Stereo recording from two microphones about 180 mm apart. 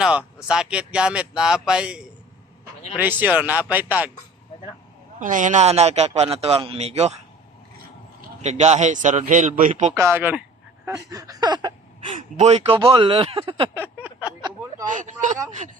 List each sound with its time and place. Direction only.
0.0 s speech: 5° right (ahead or behind)
5.2 s a man's voice: 45° right (ahead or behind)
8.4 s a man's voice: 40° right (ahead or behind)
9.9 s speech: 15° right (ahead or behind)
10.8 s a sound: 20° right (ahead or behind)
12.1 s a man's voice: 40° right (ahead or behind)
13.7 s a sound: 10° right (ahead or behind)
14.8 s speech: 45° right (ahead or behind)